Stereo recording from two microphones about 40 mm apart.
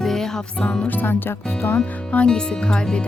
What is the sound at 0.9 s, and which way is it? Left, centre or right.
Speech, left.